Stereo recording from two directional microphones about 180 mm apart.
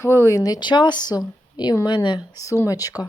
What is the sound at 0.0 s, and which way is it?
Speech, 15° left (ahead or behind).